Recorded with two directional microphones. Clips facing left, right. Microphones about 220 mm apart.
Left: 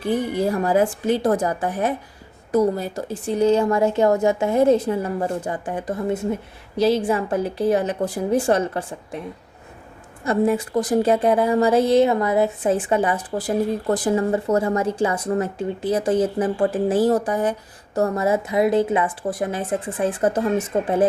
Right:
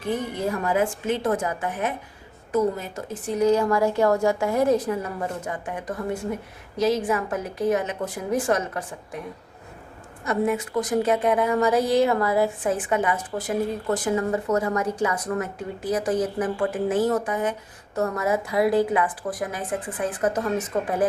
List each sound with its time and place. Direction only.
0.0 s a woman's voice: 35° left (ahead or behind)
10.2 s a woman's voice: 30° left (ahead or behind)